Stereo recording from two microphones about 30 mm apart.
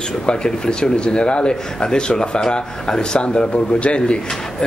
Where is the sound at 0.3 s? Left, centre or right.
Left.